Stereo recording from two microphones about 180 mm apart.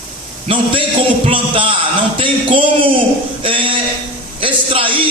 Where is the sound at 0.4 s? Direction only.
30° right (ahead or behind).